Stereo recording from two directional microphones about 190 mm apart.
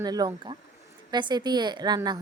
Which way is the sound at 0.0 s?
20° right (ahead or behind).